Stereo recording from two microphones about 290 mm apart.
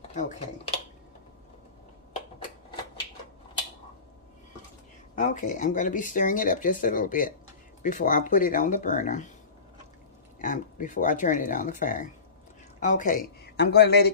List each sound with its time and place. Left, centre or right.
0.1 s speech: left
5.1 s speech: left
10.4 s speech: left